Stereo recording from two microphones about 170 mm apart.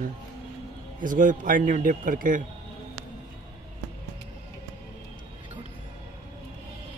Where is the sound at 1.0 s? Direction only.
50° right (ahead or behind).